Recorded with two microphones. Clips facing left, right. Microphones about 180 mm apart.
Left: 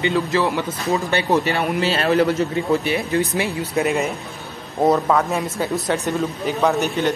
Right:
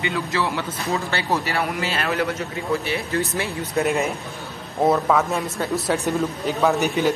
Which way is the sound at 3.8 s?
Centre (ahead or behind).